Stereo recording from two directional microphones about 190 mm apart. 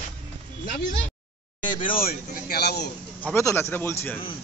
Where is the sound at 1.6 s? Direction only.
25° left (ahead or behind).